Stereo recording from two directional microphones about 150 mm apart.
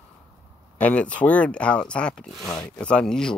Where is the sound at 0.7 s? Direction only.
10° left (ahead or behind).